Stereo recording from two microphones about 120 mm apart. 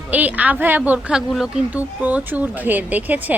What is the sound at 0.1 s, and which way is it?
A woman's voice, 15° right (ahead or behind).